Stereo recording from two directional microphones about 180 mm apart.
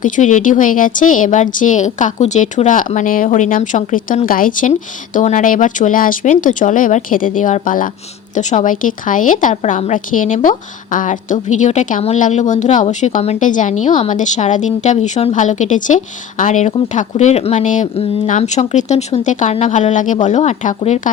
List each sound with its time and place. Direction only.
0.0 s speech: 45° left (ahead or behind)